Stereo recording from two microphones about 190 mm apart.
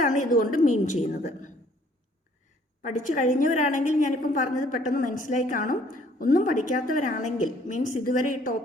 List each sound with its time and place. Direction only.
0.0 s a woman's voice: 45° left (ahead or behind)
2.8 s a woman's voice: 45° left (ahead or behind)